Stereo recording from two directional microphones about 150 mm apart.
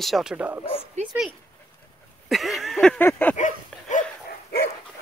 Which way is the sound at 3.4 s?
55° left (ahead or behind).